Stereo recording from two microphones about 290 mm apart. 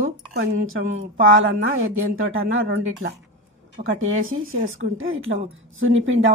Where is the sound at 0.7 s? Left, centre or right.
Right.